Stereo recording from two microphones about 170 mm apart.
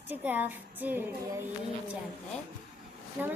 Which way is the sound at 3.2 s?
10° right (ahead or behind).